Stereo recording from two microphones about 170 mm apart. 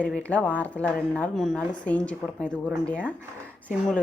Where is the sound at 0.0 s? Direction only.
10° left (ahead or behind).